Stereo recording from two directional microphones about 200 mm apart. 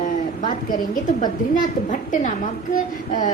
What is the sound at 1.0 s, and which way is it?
A woman's voice, 40° left (ahead or behind).